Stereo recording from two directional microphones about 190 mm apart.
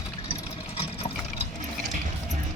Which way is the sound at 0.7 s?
30° left (ahead or behind).